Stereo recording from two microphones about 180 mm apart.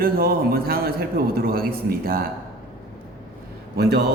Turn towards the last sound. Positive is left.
turn(degrees=-60)  # may be behind; listen again after turning